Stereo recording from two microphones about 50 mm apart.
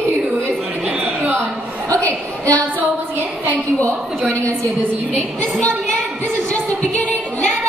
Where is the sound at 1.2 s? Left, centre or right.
Right.